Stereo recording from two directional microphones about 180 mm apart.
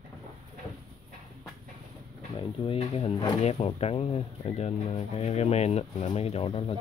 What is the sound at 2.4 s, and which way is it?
Speech, 30° left (ahead or behind).